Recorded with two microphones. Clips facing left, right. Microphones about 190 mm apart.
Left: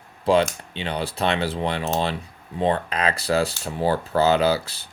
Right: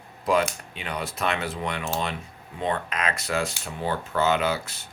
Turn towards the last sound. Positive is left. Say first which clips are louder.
# left 6 dB
turn(degrees=30)  # may be behind; listen again after turning